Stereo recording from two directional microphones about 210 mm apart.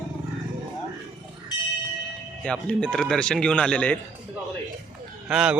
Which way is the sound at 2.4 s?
5° left (ahead or behind).